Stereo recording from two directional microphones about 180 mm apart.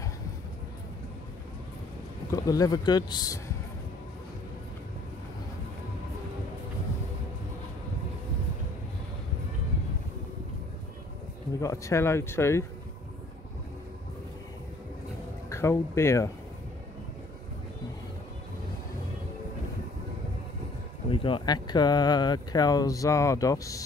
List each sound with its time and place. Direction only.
2.3 s speech: 20° left (ahead or behind)
11.6 s speech: 15° left (ahead or behind)
15.5 s speech: 15° left (ahead or behind)
21.1 s speech: 30° left (ahead or behind)